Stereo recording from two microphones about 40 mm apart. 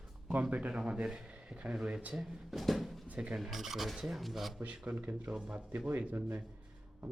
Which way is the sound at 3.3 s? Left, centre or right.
Centre.